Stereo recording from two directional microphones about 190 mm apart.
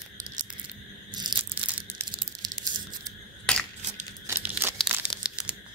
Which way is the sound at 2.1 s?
25° right (ahead or behind).